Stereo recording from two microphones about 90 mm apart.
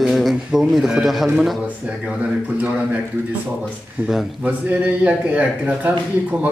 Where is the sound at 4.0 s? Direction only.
20° right (ahead or behind).